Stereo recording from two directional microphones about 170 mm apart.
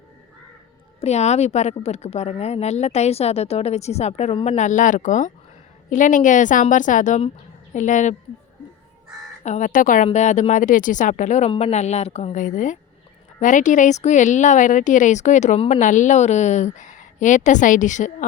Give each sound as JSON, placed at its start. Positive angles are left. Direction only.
{"t": 1.0, "sound": "a woman's voice", "side_deg": 40}
{"t": 9.4, "sound": "a woman's voice", "side_deg": 45}